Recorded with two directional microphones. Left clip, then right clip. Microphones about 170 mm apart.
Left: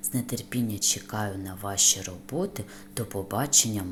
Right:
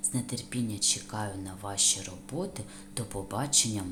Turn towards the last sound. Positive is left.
turn(degrees=20)  # may be behind; listen again after turning